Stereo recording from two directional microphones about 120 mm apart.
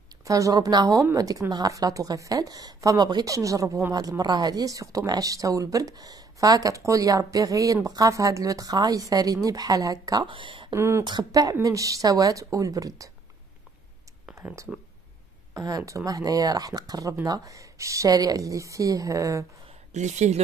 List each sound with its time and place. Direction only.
0.2 s speech: 30° right (ahead or behind)
10.2 s speech: 45° right (ahead or behind)
10.7 s speech: 20° right (ahead or behind)
11.1 s speech: 35° right (ahead or behind)
14.3 s speech: 25° right (ahead or behind)
19.9 s speech: 80° right